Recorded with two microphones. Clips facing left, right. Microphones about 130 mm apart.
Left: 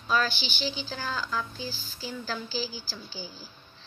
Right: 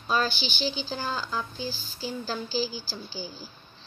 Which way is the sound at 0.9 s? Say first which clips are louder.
Right 1 dB; 25° right (ahead or behind).